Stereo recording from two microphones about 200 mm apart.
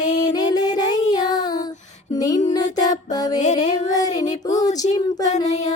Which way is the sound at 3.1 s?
20° left (ahead or behind).